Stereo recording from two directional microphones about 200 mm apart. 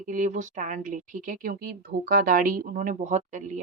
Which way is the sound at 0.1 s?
40° right (ahead or behind).